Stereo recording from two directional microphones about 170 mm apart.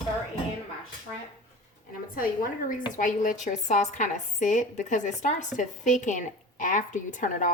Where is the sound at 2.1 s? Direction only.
55° left (ahead or behind).